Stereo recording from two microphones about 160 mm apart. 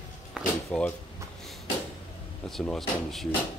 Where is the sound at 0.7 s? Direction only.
5° left (ahead or behind).